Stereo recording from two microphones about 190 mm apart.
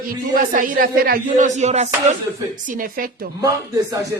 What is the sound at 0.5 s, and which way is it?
Music, 45° right (ahead or behind).